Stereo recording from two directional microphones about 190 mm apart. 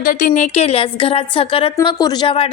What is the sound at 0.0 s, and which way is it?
A woman's voice, 45° left (ahead or behind).